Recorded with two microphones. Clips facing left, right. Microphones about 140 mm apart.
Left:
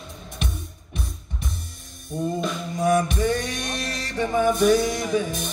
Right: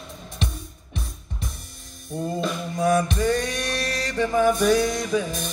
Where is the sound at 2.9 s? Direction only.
25° left (ahead or behind).